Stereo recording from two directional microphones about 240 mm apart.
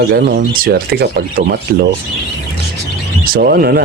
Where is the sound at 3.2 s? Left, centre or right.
Right.